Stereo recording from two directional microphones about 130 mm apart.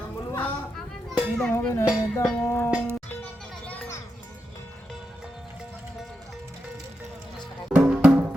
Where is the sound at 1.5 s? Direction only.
20° left (ahead or behind).